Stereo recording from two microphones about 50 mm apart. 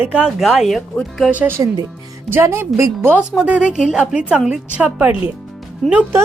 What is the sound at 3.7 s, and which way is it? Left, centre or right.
A woman's voice, centre.